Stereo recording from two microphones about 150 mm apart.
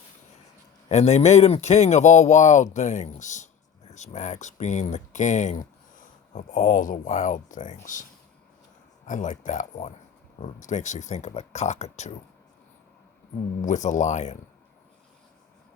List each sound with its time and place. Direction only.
0.9 s speech: 45° left (ahead or behind)
9.0 s speech: 55° left (ahead or behind)
13.6 s speech: 55° left (ahead or behind)